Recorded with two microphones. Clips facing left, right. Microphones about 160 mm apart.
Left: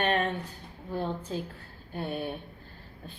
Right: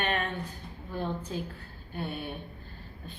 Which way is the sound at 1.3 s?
30° left (ahead or behind).